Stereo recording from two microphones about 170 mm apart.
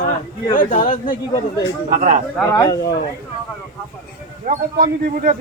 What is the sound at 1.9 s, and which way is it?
Speech, 45° right (ahead or behind).